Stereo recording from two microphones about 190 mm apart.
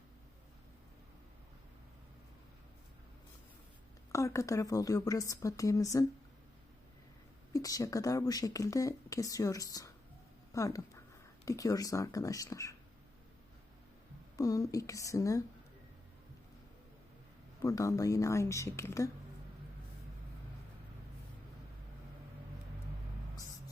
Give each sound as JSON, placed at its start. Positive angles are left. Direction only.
{"t": 4.1, "sound": "speech", "side_deg": 15}
{"t": 7.5, "sound": "speech", "side_deg": 20}
{"t": 14.3, "sound": "speech", "side_deg": 20}
{"t": 17.6, "sound": "speech", "side_deg": 20}